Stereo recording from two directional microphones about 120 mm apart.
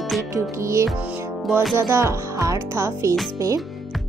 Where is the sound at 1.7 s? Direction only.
25° right (ahead or behind).